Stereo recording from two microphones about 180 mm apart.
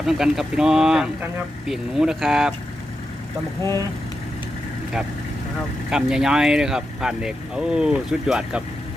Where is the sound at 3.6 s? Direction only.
15° left (ahead or behind).